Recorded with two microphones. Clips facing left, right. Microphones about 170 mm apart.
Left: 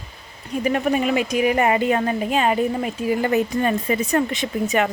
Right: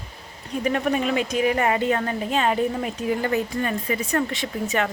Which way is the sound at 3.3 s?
25° left (ahead or behind).